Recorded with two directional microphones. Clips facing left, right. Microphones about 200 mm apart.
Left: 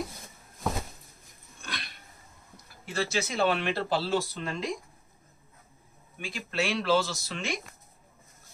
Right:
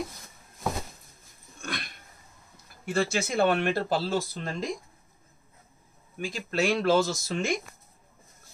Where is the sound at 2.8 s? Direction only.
50° right (ahead or behind).